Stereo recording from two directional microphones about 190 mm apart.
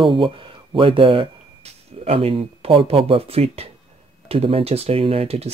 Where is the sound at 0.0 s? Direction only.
25° right (ahead or behind).